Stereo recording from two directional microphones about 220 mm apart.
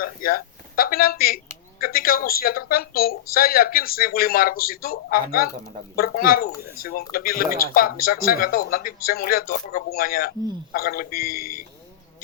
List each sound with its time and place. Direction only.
0.0 s speech: 40° left (ahead or behind)